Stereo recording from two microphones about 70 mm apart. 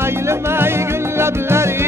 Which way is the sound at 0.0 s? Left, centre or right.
Right.